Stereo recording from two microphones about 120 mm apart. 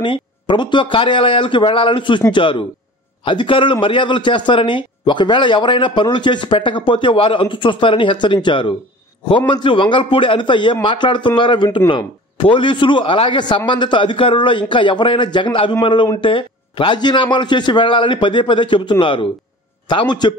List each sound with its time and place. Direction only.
0.0 s a man's voice: 45° left (ahead or behind)